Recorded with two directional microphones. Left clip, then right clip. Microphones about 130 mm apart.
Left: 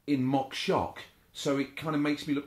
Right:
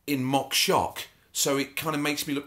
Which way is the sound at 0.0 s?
25° right (ahead or behind).